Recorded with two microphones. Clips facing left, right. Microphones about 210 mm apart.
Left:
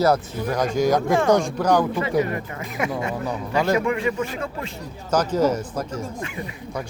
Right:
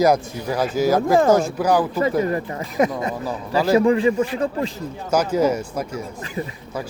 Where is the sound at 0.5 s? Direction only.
5° right (ahead or behind).